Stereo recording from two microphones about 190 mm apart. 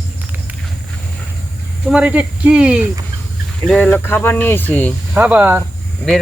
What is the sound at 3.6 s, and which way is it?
Speech, 5° left (ahead or behind).